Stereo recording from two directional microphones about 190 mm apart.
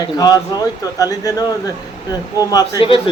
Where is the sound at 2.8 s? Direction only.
30° left (ahead or behind).